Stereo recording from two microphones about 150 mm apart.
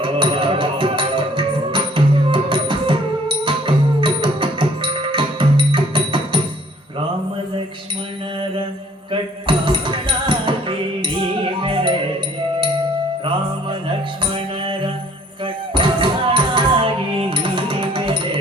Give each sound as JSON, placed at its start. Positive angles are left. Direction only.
{"t": 0.0, "sound": "music", "side_deg": -35}
{"t": 9.5, "sound": "music", "side_deg": -35}
{"t": 13.2, "sound": "music", "side_deg": -35}
{"t": 15.7, "sound": "music", "side_deg": -35}